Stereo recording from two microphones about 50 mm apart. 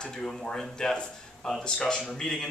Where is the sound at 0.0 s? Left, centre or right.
Centre.